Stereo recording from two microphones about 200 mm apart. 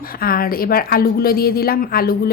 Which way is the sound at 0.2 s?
45° left (ahead or behind).